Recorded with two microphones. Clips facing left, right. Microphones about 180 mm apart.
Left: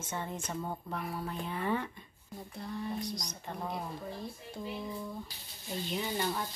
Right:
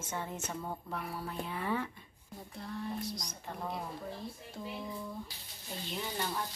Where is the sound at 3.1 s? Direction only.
5° right (ahead or behind).